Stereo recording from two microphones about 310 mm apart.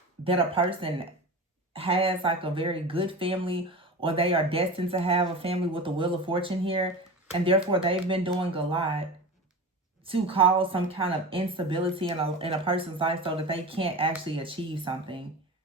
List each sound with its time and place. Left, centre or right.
0.3 s speech: centre
10.1 s speech: centre